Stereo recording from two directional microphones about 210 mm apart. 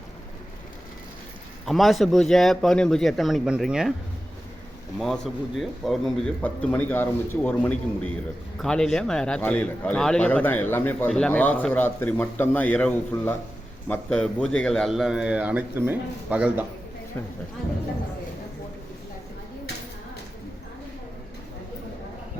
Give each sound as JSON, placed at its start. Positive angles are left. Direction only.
{"t": 1.6, "sound": "a man's voice", "side_deg": 0}
{"t": 4.9, "sound": "a man's voice", "side_deg": 0}